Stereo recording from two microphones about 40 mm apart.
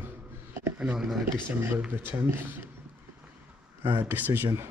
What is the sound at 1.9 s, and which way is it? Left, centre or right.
Speech, right.